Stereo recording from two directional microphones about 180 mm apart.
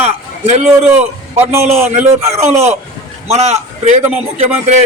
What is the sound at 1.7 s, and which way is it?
Speech, 40° right (ahead or behind).